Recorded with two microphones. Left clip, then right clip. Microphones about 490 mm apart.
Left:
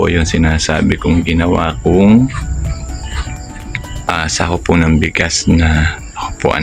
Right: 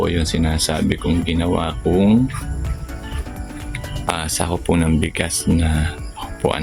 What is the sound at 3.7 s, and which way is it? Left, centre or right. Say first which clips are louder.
Speech: left 6 dB; right.